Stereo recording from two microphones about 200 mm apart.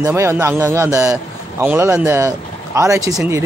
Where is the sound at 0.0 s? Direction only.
15° right (ahead or behind).